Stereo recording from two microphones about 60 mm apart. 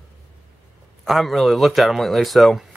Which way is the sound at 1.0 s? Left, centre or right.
Centre.